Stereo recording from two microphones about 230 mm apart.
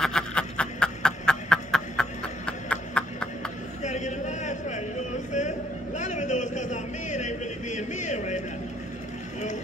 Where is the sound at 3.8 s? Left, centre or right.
Left.